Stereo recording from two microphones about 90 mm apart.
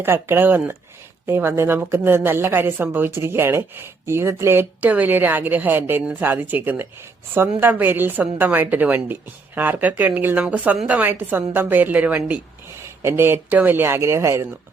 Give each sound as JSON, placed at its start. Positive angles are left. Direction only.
{"t": 0.0, "sound": "a woman's voice", "side_deg": -25}
{"t": 13.0, "sound": "a woman's voice", "side_deg": -25}